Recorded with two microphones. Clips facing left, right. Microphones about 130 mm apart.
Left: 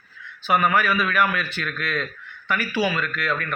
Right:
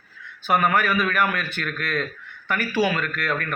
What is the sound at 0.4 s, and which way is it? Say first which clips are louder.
Speech: even; 45° right (ahead or behind).